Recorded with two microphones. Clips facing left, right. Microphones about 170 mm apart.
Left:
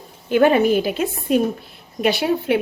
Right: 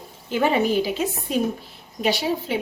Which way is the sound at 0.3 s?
60° left (ahead or behind).